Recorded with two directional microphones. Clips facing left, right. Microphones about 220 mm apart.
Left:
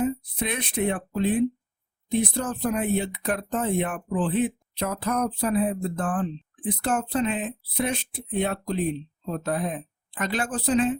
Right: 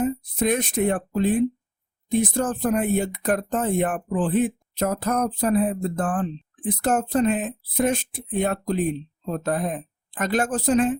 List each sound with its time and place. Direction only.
0.0 s speech: 45° right (ahead or behind)